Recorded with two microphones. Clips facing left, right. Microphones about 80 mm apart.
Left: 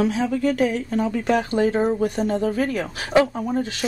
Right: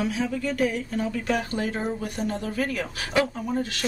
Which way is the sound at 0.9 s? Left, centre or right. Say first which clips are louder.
Left 5 dB; left.